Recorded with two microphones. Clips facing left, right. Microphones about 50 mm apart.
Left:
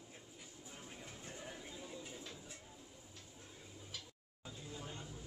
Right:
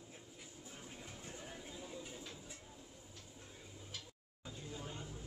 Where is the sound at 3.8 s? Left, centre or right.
Centre.